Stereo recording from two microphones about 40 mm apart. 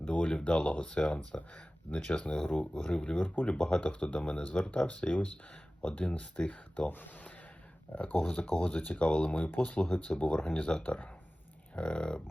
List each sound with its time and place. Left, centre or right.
0.0 s speech: left
1.9 s speech: left
2.2 s speech: left
8.5 s speech: left
11.8 s speech: left